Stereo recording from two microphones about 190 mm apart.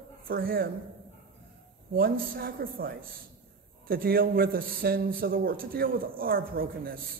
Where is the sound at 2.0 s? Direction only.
50° right (ahead or behind).